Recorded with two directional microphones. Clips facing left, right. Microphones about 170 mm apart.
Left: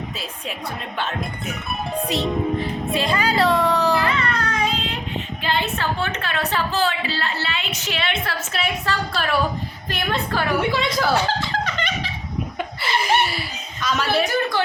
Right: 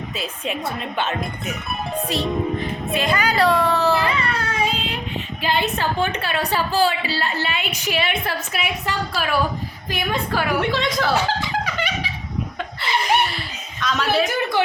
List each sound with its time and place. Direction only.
0.9 s speech: centre (ahead or behind)
2.0 s speech: 20° left (ahead or behind)
3.9 s a sound: 15° right (ahead or behind)
5.4 s a woman's voice: 15° right (ahead or behind)
10.6 s speech: 5° left (ahead or behind)
11.1 s music: 10° right (ahead or behind)
12.5 s chuckle: 5° left (ahead or behind)
13.8 s speech: centre (ahead or behind)